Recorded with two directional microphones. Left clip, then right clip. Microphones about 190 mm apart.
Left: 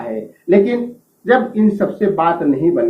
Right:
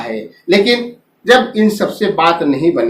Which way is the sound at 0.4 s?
25° right (ahead or behind).